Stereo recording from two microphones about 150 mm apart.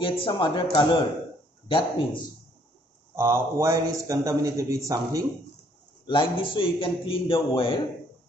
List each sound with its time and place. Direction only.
0.0 s a man's voice: 35° left (ahead or behind)
3.2 s a man's voice: 15° right (ahead or behind)
6.0 s a man's voice: 35° left (ahead or behind)